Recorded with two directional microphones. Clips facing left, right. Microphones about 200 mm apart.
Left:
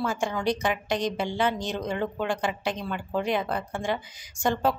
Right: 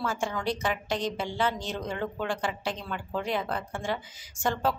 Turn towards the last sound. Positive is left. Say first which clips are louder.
# left 3 dB
turn(degrees=15)  # may be behind; listen again after turning